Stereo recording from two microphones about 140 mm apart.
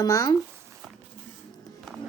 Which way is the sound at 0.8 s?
5° right (ahead or behind).